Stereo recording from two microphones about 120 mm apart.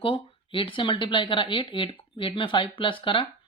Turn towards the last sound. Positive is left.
turn(degrees=45)  # may be behind; listen again after turning